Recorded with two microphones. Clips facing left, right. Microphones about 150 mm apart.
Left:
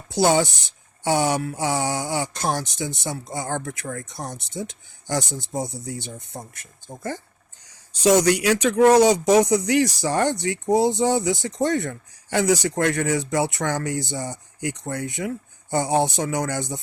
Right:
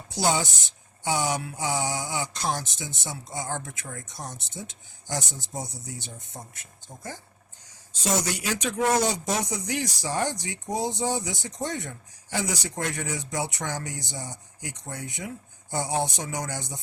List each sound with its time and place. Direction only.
0.1 s speech: 60° left (ahead or behind)
8.0 s speech: 70° left (ahead or behind)